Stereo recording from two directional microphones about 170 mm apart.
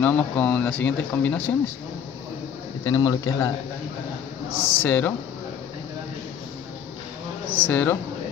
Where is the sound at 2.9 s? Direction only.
20° left (ahead or behind).